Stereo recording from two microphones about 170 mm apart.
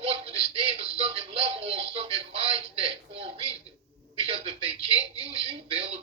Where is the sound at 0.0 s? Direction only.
35° right (ahead or behind).